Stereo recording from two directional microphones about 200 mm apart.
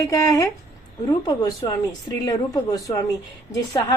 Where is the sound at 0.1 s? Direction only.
15° left (ahead or behind).